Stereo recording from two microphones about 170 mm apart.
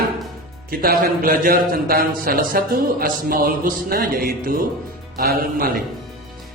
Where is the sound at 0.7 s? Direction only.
60° right (ahead or behind).